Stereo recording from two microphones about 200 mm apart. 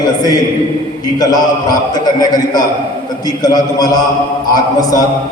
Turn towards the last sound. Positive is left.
turn(degrees=20)  # may be behind; listen again after turning